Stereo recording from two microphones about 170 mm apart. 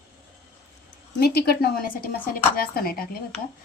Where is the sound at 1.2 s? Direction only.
70° left (ahead or behind).